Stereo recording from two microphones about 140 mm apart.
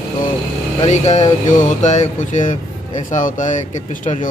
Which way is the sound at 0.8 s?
55° left (ahead or behind).